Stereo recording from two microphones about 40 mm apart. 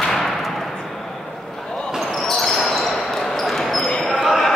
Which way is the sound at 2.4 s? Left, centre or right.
Centre.